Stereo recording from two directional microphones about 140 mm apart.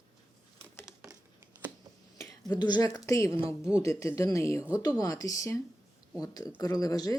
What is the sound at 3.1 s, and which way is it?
Speech, 20° left (ahead or behind).